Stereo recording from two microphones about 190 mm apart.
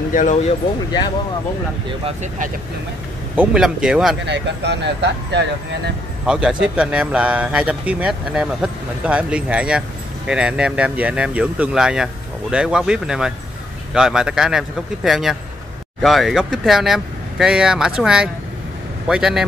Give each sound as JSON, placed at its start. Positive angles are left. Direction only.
{"t": 0.1, "sound": "speech", "side_deg": 40}
{"t": 3.3, "sound": "speech", "side_deg": -5}
{"t": 4.3, "sound": "speech", "side_deg": -65}
{"t": 6.2, "sound": "speech", "side_deg": -5}